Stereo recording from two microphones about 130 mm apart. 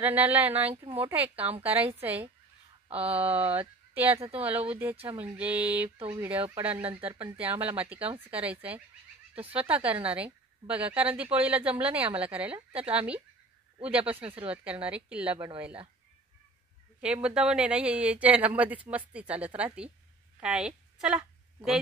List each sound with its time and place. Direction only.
0.0 s speech: 15° right (ahead or behind)
15.3 s speech: 40° right (ahead or behind)
17.0 s speech: 10° right (ahead or behind)